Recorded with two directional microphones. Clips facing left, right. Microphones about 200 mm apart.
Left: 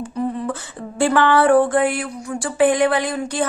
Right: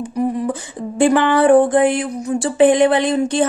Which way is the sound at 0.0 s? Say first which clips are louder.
Right 4 dB; 15° right (ahead or behind).